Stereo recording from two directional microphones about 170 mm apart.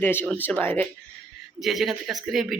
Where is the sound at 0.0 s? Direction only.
10° left (ahead or behind).